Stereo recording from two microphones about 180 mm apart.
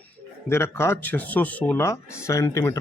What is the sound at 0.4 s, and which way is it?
A man's voice, 15° left (ahead or behind).